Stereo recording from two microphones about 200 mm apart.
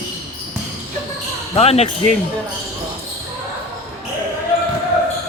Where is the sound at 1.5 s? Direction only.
30° left (ahead or behind).